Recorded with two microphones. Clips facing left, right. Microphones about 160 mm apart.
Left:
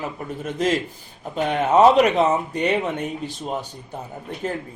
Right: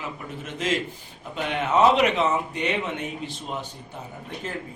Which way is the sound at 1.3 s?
40° left (ahead or behind).